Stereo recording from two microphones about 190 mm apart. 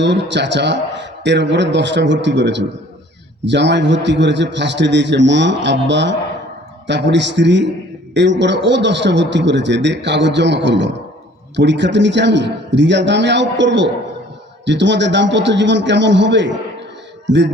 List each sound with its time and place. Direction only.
0.0 s a man's voice: 70° right (ahead or behind)